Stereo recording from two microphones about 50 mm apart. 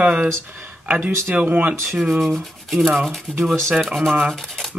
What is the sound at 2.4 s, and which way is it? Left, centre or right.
Rub, centre.